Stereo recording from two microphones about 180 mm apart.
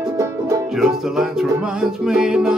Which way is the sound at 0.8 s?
Centre (ahead or behind).